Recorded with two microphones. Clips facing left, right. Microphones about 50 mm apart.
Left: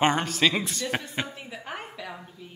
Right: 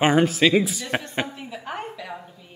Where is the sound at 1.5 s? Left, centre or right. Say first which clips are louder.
Right 5 dB; centre.